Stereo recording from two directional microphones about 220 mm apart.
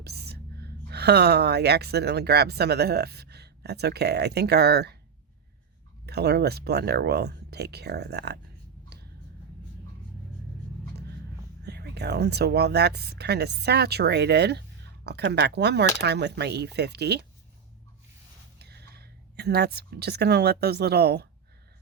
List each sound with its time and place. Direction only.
0.0 s speech: 45° right (ahead or behind)
6.1 s speech: 45° right (ahead or behind)
11.6 s speech: 50° right (ahead or behind)
18.6 s speech: 45° right (ahead or behind)